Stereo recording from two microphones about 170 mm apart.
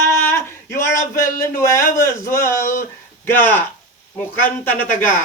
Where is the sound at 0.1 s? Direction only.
15° left (ahead or behind).